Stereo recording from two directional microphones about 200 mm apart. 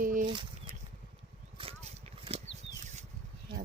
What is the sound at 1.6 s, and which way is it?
Vehicle, 25° right (ahead or behind).